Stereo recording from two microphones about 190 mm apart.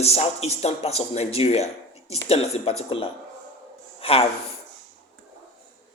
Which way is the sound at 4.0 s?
30° left (ahead or behind).